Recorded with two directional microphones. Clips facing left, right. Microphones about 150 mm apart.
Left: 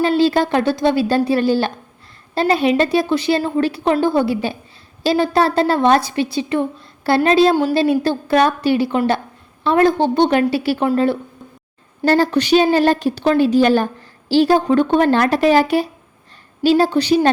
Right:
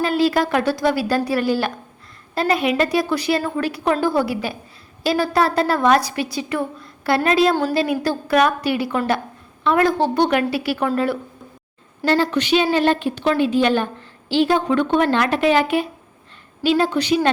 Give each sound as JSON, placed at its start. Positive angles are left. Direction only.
{"t": 0.0, "sound": "a woman's voice", "side_deg": 30}
{"t": 12.0, "sound": "a woman's voice", "side_deg": 40}